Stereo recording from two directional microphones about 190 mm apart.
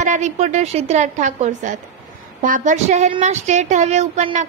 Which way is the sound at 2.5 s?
40° right (ahead or behind).